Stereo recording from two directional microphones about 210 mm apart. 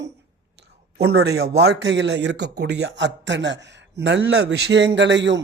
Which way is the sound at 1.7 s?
55° right (ahead or behind).